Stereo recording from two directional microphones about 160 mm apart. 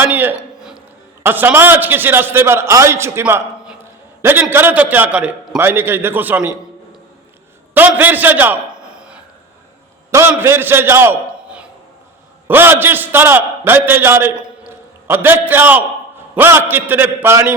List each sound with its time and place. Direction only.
0.0 s a sound: 10° right (ahead or behind)
1.2 s a man's voice: 10° right (ahead or behind)
7.7 s a man's voice: 10° right (ahead or behind)
10.1 s a man's voice: 15° right (ahead or behind)